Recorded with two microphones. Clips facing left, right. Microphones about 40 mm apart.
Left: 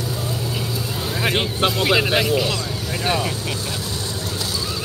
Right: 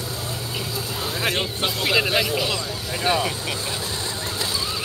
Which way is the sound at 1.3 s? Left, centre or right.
Centre.